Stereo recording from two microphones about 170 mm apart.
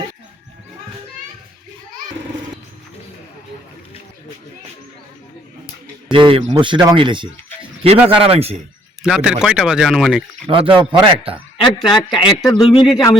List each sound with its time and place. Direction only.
6.1 s speech: 30° right (ahead or behind)
9.0 s speech: 5° right (ahead or behind)
10.4 s speech: 30° right (ahead or behind)
11.9 s speech: 25° left (ahead or behind)
12.8 s speech: centre (ahead or behind)